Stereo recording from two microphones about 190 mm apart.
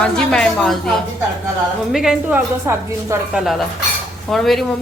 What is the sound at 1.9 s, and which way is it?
Speech, centre (ahead or behind).